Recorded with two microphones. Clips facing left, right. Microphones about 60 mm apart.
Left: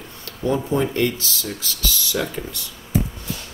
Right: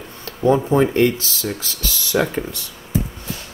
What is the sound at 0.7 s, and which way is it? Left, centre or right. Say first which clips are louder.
Speech: right 5 dB; right.